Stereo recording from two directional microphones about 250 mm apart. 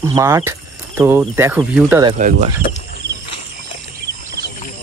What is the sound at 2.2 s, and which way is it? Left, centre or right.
Speech, right.